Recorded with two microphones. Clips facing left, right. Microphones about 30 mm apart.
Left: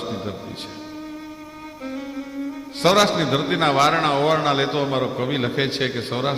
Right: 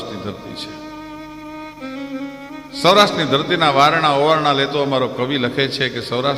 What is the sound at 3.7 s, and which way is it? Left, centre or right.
A man's voice, right.